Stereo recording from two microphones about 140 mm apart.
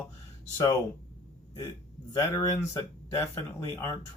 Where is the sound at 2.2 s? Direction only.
25° left (ahead or behind).